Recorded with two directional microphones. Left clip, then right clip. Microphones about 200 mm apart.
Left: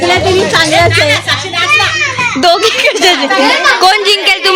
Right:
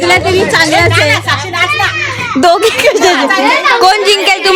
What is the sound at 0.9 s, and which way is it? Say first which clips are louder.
Speech: even; 55° right (ahead or behind).